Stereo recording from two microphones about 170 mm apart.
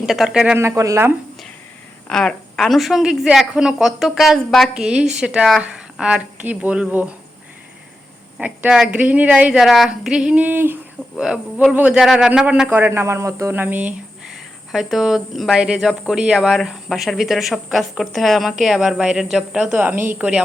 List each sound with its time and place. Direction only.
0.0 s a man's voice: 5° right (ahead or behind)
0.6 s a woman's voice: 20° right (ahead or behind)
2.0 s a man's voice: 5° left (ahead or behind)
8.4 s a woman's voice: 10° right (ahead or behind)